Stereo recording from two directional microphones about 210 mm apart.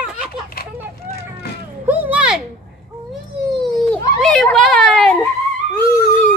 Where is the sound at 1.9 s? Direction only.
10° right (ahead or behind).